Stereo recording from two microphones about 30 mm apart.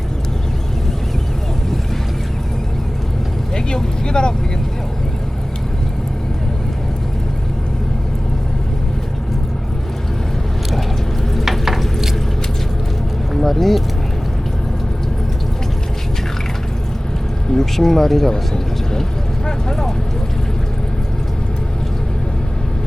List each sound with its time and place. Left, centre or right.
4.0 s speech: left
11.6 s stir: centre
13.3 s speech: centre
17.5 s speech: centre
18.3 s a sound: left
19.5 s vehicle: left